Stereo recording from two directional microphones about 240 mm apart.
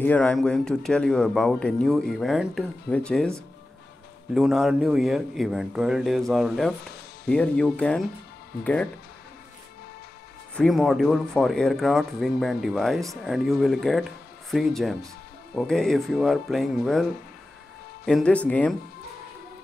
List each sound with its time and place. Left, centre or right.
0.0 s speech: centre
10.5 s speech: centre
18.0 s speech: centre